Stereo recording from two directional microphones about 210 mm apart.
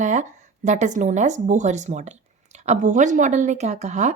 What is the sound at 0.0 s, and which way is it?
A woman's voice, 35° right (ahead or behind).